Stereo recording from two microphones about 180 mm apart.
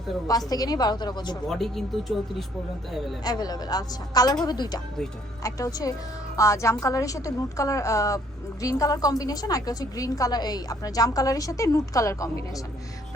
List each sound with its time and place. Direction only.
0.3 s a woman's voice: 20° left (ahead or behind)
1.5 s speech: centre (ahead or behind)
3.2 s a woman's voice: 20° left (ahead or behind)